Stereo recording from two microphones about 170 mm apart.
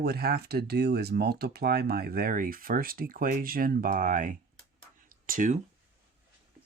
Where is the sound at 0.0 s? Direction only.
70° right (ahead or behind); by 4.4 s 50° right (ahead or behind).